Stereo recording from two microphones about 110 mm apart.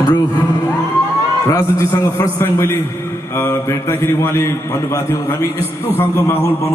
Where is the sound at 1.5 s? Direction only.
30° left (ahead or behind).